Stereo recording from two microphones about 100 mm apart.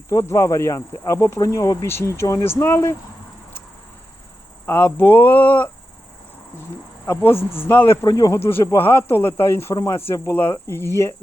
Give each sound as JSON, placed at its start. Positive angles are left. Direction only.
{"t": 0.1, "sound": "speech", "side_deg": 30}
{"t": 4.6, "sound": "speech", "side_deg": 25}
{"t": 7.0, "sound": "speech", "side_deg": 20}
{"t": 7.3, "sound": "a man's voice", "side_deg": 70}
{"t": 7.7, "sound": "speech", "side_deg": 20}
{"t": 8.0, "sound": "speech", "side_deg": 35}
{"t": 8.6, "sound": "speech", "side_deg": 20}